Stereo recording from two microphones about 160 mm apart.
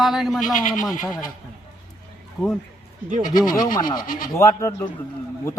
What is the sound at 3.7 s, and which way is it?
Speech, 25° left (ahead or behind).